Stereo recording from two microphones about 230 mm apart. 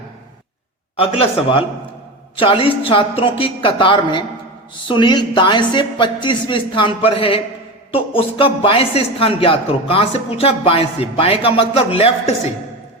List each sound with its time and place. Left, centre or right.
0.9 s speech: left